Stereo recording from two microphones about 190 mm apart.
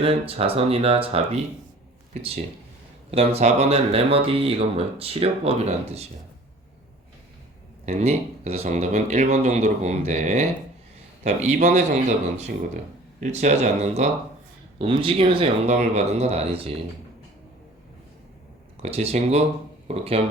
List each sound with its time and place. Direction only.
0.0 s speech: 30° right (ahead or behind)
3.1 s speech: 30° right (ahead or behind)
7.9 s speech: 35° right (ahead or behind)
18.8 s speech: 35° right (ahead or behind)